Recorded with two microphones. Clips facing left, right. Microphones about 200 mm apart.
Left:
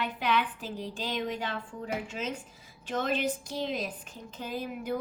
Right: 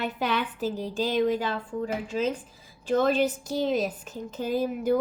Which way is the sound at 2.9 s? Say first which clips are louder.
Right 7 dB; 35° right (ahead or behind).